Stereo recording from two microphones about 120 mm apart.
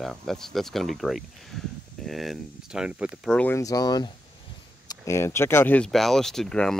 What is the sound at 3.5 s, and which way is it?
Speech, 30° left (ahead or behind).